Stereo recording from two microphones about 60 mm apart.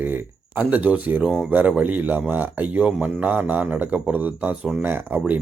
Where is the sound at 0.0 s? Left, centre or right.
Right.